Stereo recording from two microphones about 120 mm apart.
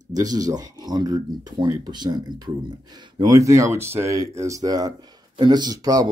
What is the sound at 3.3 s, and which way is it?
Speech, 25° right (ahead or behind).